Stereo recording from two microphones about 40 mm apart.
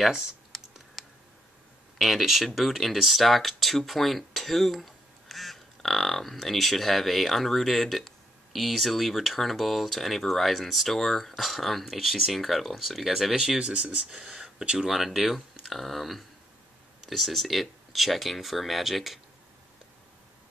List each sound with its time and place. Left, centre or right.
0.0 s speech: centre
0.5 s computer keyboard: centre
2.0 s speech: centre
13.6 s speech: right
14.9 s speech: centre